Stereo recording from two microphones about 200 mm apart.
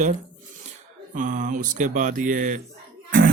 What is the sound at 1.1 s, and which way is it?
A man's voice, 40° right (ahead or behind).